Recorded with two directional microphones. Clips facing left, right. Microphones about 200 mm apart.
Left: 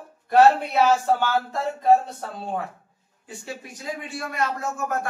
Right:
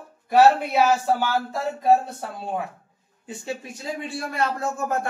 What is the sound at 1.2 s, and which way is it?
Speech, 10° right (ahead or behind).